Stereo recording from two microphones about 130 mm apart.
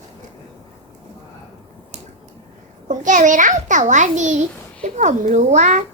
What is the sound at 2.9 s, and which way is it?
A child's voice, 75° right (ahead or behind).